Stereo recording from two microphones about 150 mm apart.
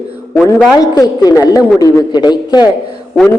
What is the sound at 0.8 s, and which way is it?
A woman's voice, 25° left (ahead or behind).